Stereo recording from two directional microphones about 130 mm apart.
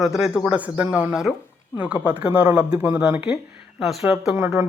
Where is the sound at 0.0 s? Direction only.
5° right (ahead or behind).